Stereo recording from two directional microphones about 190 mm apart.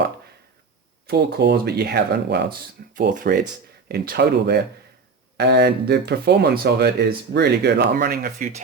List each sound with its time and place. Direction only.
1.0 s speech: 55° right (ahead or behind)